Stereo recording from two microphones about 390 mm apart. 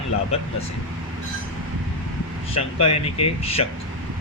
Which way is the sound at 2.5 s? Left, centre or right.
Centre.